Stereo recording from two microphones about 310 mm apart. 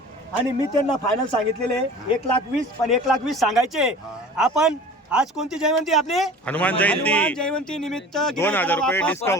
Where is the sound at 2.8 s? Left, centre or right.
Centre.